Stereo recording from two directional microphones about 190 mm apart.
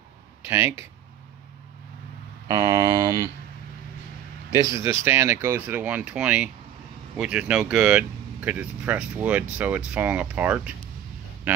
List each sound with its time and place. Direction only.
0.4 s speech: 10° right (ahead or behind)
2.4 s speech: 20° right (ahead or behind)
4.5 s speech: 15° right (ahead or behind)